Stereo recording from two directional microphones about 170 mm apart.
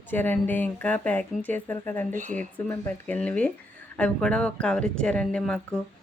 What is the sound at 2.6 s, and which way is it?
A woman's voice, 10° left (ahead or behind).